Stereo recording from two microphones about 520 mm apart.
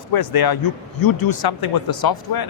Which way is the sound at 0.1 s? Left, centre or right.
Left.